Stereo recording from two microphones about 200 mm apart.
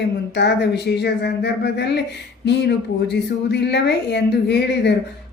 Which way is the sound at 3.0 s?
60° left (ahead or behind).